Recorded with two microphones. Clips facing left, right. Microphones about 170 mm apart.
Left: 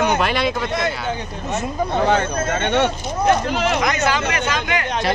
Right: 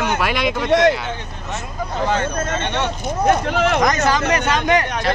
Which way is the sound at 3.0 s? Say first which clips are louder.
Even; 50° right (ahead or behind).